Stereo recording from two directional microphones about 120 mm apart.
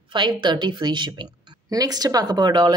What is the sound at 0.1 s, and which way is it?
A woman's voice, 40° right (ahead or behind).